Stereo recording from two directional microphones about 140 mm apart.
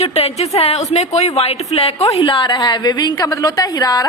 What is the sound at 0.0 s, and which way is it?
A woman's voice, 45° left (ahead or behind).